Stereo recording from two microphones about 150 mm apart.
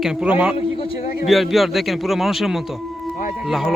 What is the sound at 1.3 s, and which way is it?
Speech, centre (ahead or behind).